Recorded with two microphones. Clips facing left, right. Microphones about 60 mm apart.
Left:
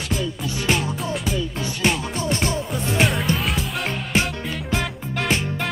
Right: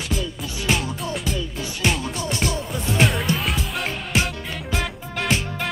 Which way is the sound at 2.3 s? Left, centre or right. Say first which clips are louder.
Left 2 dB; left.